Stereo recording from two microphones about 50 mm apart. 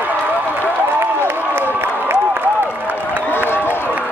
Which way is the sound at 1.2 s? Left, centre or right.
Right.